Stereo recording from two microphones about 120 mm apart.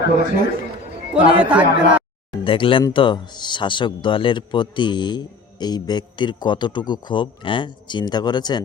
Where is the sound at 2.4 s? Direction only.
45° left (ahead or behind).